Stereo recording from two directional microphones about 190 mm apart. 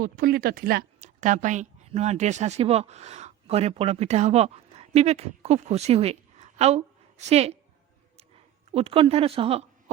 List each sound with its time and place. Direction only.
0.0 s a woman's voice: 50° right (ahead or behind); by 7.6 s 35° right (ahead or behind)
8.7 s a woman's voice: 30° right (ahead or behind)